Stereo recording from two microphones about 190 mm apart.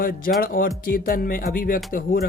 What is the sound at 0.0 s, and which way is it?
Speech, 50° left (ahead or behind).